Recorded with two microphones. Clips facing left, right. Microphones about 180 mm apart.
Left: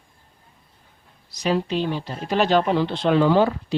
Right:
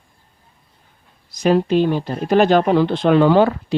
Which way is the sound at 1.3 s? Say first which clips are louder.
Right 7 dB; 50° right (ahead or behind).